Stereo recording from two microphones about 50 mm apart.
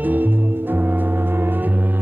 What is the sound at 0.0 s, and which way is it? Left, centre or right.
Music, right.